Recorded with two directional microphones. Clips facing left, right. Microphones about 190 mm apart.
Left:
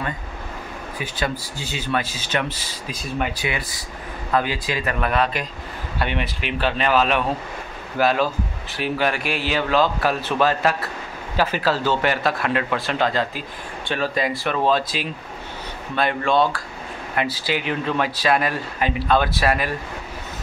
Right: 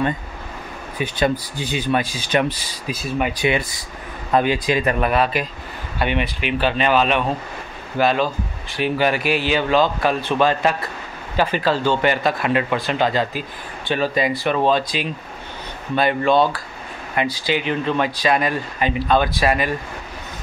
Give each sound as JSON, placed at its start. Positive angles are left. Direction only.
{"t": 0.9, "sound": "speech", "side_deg": -20}
{"t": 3.3, "sound": "speech", "side_deg": -20}
{"t": 5.1, "sound": "speech", "side_deg": -5}